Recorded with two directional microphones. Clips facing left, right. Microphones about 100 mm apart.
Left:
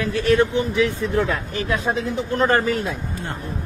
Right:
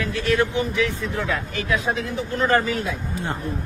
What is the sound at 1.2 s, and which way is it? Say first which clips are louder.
Speech: left 3 dB; 40° left (ahead or behind).